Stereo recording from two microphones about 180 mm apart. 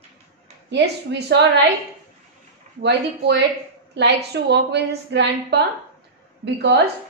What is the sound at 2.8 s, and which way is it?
A woman's voice, 70° right (ahead or behind).